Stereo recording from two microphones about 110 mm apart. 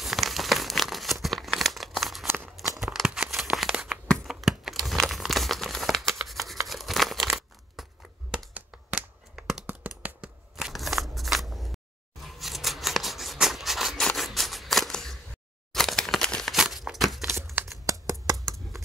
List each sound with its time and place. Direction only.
0.0 s crumpling: centre (ahead or behind)
2.7 s tearing: centre (ahead or behind)
4.1 s crumpling: centre (ahead or behind)
8.5 s a sound: 5° right (ahead or behind)
17.8 s a sound: 30° right (ahead or behind)
18.2 s shuffling cards: 30° right (ahead or behind)